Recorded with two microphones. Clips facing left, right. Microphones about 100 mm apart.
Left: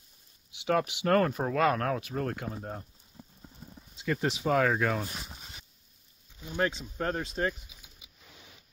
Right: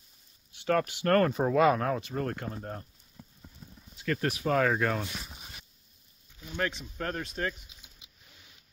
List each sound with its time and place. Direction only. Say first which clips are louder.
0.7 s speech: even; 10° left (ahead or behind)
3.7 s a sound: even; 25° left (ahead or behind)
4.1 s speech: even; 15° left (ahead or behind)
4.5 s speech: even; 5° left (ahead or behind)
6.4 s speech: left 3 dB; 15° left (ahead or behind)
6.7 s speech: left 3 dB; 30° left (ahead or behind)
7.4 s speech: left 3 dB; 20° left (ahead or behind)